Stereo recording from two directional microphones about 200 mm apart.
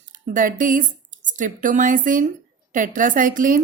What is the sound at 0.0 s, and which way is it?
A woman's voice, 40° right (ahead or behind).